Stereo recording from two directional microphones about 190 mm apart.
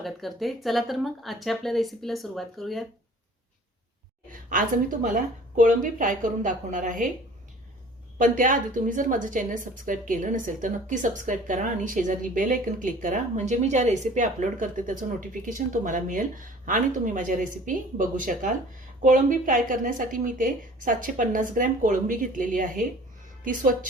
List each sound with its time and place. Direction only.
0.0 s speech: centre (ahead or behind)
4.3 s a woman's voice: 45° right (ahead or behind)
8.2 s a woman's voice: 45° right (ahead or behind)